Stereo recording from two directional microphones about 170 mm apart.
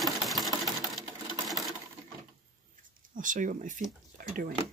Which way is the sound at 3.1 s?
50° right (ahead or behind).